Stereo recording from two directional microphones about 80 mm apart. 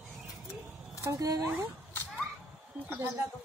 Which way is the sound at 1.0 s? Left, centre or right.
Right.